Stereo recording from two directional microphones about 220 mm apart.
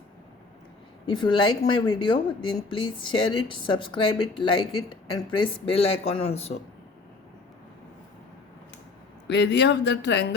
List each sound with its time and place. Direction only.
1.0 s speech: 20° left (ahead or behind)
9.2 s speech: 50° left (ahead or behind)